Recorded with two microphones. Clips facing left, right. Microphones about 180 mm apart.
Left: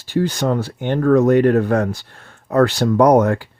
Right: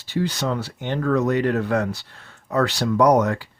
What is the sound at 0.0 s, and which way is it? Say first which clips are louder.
Speech: left 5 dB; 45° left (ahead or behind).